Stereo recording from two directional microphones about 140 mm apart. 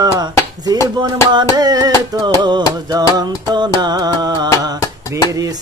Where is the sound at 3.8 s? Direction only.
30° right (ahead or behind).